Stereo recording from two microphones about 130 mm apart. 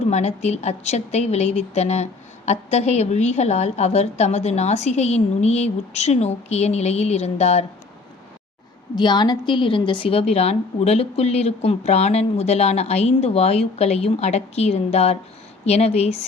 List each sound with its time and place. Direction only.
0.1 s a woman's voice: 60° left (ahead or behind)
9.0 s a woman's voice: 35° left (ahead or behind); by 16.2 s 55° left (ahead or behind)